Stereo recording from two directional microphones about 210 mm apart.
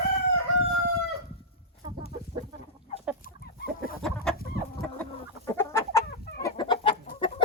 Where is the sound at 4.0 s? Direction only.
Centre (ahead or behind).